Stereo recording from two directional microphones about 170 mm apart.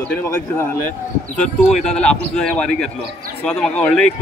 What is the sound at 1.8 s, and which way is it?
A man's voice, 5° left (ahead or behind).